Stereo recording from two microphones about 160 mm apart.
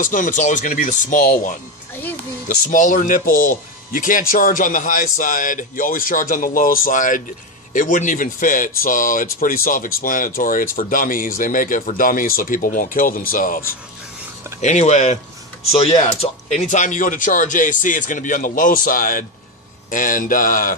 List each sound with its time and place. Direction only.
0.0 s speech: 55° left (ahead or behind)
14.6 s speech: 45° left (ahead or behind)
16.4 s speech: 50° left (ahead or behind)